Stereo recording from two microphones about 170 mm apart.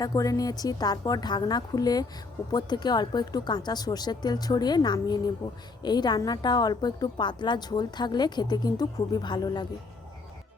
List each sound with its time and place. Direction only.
0.0 s a woman's voice: 20° left (ahead or behind)